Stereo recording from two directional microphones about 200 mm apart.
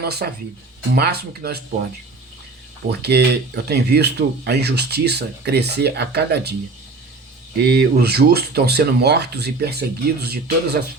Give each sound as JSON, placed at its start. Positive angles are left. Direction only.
{"t": 0.0, "sound": "speech", "side_deg": -50}
{"t": 3.0, "sound": "speech", "side_deg": -55}
{"t": 7.7, "sound": "speech", "side_deg": -55}